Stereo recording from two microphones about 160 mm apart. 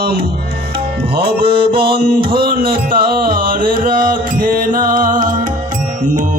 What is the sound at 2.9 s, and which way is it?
Music, 65° right (ahead or behind).